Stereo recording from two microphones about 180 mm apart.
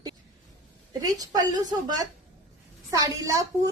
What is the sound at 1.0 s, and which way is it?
Speech, 20° right (ahead or behind).